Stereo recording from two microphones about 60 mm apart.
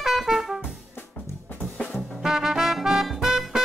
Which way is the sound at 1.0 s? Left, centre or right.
Left.